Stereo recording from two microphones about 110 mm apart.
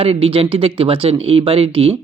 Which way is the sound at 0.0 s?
55° right (ahead or behind).